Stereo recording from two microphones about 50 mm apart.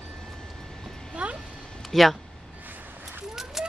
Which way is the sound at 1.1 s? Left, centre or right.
Right.